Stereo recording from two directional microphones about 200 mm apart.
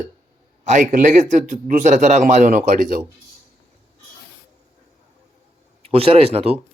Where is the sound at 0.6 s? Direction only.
40° right (ahead or behind).